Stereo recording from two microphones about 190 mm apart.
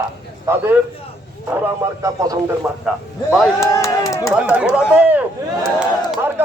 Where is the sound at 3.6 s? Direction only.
15° left (ahead or behind).